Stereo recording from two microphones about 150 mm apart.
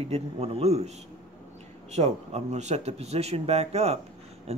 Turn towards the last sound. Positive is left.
turn(degrees=-45)  # may be behind; listen again after turning